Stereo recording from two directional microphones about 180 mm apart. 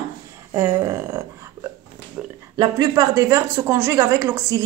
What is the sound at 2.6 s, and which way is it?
Speech, 20° right (ahead or behind).